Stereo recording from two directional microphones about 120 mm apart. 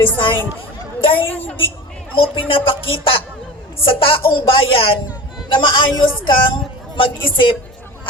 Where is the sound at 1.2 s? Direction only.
15° left (ahead or behind).